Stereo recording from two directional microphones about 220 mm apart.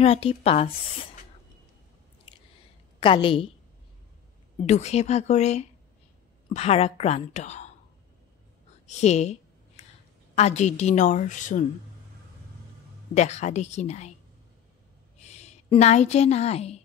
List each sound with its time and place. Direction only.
0.0 s a woman's voice: 25° left (ahead or behind)
3.0 s a woman's voice: 25° left (ahead or behind)
4.6 s a woman's voice: 30° left (ahead or behind)
8.8 s a sound: 30° left (ahead or behind)
10.3 s a woman's voice: 30° left (ahead or behind)
13.1 s a woman's voice: 30° left (ahead or behind)
15.1 s a woman's voice: 30° left (ahead or behind)